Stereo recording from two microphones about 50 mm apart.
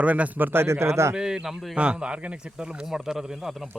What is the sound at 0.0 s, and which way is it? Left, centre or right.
Speech, right.